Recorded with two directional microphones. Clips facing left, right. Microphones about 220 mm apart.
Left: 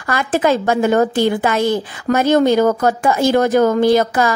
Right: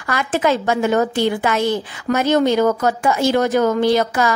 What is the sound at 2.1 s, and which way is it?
Speech, 50° left (ahead or behind).